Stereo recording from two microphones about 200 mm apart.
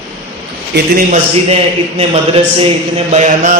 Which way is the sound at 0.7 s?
60° right (ahead or behind).